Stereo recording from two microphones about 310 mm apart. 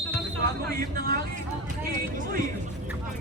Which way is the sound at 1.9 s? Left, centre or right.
Right.